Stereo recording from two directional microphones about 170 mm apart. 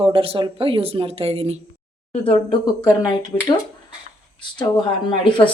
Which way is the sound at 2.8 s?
20° left (ahead or behind).